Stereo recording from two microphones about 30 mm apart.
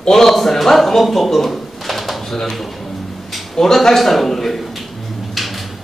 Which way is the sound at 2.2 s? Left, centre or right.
Centre.